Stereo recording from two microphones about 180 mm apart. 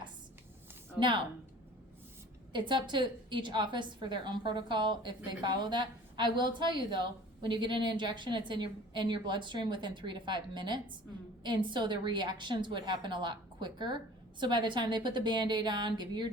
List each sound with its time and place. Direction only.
0.9 s speech: 25° right (ahead or behind)
2.5 s a woman's voice: 25° right (ahead or behind)